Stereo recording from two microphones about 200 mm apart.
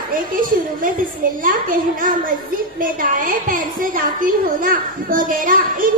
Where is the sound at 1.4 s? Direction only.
45° right (ahead or behind).